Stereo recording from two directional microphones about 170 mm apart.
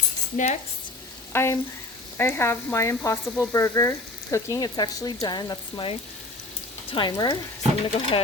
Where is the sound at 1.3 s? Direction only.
15° left (ahead or behind).